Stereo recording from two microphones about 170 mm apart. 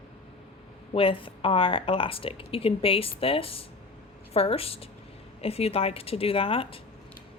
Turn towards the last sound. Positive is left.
turn(degrees=35)  # may be behind; listen again after turning